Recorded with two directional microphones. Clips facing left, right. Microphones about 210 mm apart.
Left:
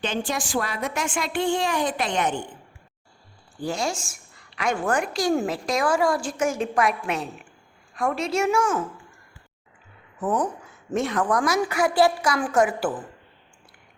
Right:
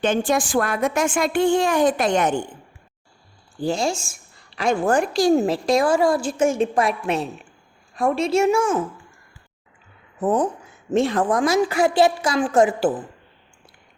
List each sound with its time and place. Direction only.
0.0 s a woman's voice: 50° right (ahead or behind)
3.6 s a woman's voice: 25° right (ahead or behind)
10.2 s a woman's voice: 25° right (ahead or behind)